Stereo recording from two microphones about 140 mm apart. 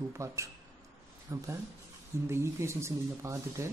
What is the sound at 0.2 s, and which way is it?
Speech, 20° right (ahead or behind).